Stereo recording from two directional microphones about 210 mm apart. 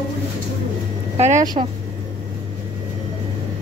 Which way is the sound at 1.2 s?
35° right (ahead or behind).